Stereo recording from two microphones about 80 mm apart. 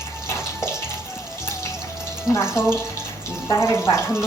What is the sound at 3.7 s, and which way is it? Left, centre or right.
Speech, left.